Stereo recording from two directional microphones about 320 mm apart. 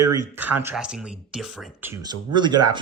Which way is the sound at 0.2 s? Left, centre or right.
Centre.